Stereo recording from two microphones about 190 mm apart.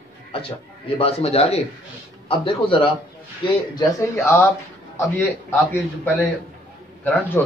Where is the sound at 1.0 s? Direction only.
30° left (ahead or behind).